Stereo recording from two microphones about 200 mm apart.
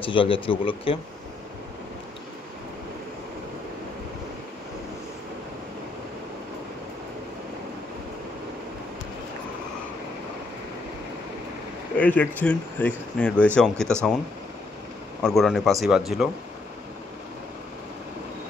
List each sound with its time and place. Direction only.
0.0 s speech: 25° left (ahead or behind)
12.0 s speech: 10° left (ahead or behind)
15.2 s speech: centre (ahead or behind)